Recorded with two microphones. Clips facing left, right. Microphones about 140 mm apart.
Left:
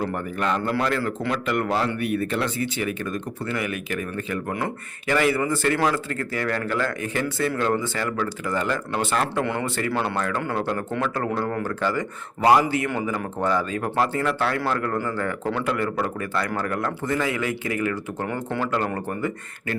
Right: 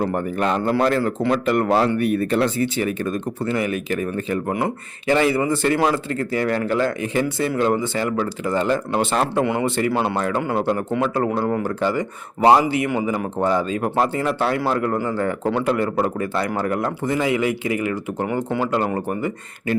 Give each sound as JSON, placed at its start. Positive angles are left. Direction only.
{"t": 0.0, "sound": "speech", "side_deg": -35}
{"t": 9.4, "sound": "speech", "side_deg": -15}